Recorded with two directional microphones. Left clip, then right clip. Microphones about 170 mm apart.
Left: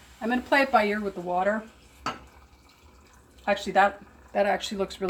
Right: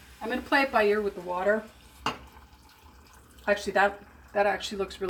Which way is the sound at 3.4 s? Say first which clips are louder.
Left 2 dB; 40° left (ahead or behind).